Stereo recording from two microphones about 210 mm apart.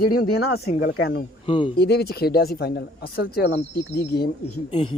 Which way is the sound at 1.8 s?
50° left (ahead or behind).